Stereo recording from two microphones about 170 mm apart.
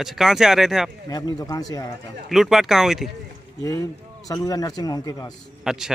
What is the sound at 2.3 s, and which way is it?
Speech, centre (ahead or behind).